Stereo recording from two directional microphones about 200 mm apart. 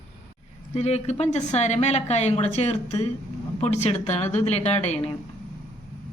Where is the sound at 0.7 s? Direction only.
35° left (ahead or behind).